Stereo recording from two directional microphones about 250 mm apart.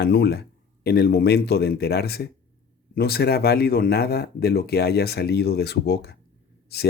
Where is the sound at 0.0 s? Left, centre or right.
Left.